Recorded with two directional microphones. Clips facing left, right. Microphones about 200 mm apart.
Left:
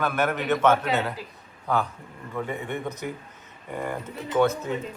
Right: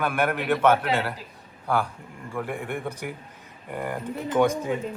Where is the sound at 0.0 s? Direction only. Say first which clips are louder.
Even; 10° right (ahead or behind).